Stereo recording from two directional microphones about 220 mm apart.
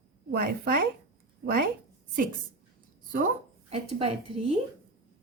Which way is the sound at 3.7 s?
25° right (ahead or behind).